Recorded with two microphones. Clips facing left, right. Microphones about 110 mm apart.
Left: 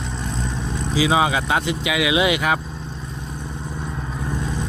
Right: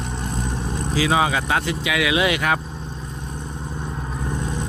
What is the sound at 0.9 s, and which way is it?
Speech, 15° left (ahead or behind).